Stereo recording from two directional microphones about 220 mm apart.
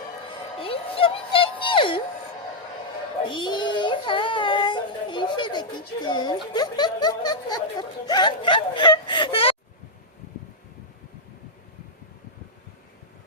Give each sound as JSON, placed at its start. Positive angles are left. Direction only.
{"t": 0.6, "sound": "a sound", "side_deg": 25}
{"t": 3.2, "sound": "child singing", "side_deg": 20}
{"t": 6.5, "sound": "speech", "side_deg": 20}